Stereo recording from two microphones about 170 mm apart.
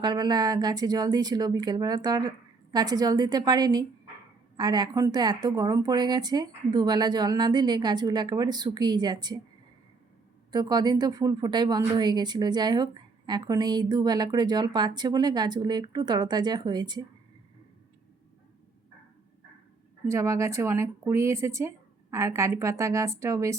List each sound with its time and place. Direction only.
0.0 s a woman's voice: 25° right (ahead or behind)
10.5 s a woman's voice: 25° right (ahead or behind)
20.1 s speech: 15° right (ahead or behind)